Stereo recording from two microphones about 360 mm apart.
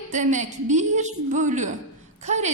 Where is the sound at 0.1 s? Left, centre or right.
Centre.